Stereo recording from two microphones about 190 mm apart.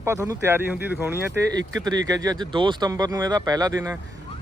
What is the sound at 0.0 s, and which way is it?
Speech, 15° right (ahead or behind).